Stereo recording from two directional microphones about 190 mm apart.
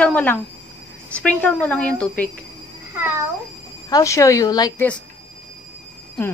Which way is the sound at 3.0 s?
10° right (ahead or behind).